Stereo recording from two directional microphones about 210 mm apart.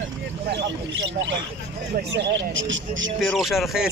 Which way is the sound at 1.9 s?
60° right (ahead or behind).